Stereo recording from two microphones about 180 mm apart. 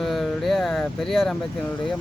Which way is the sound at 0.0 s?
Centre (ahead or behind).